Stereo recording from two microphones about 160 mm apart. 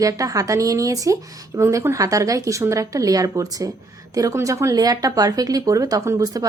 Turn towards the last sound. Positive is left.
turn(degrees=-20)  # may be behind; listen again after turning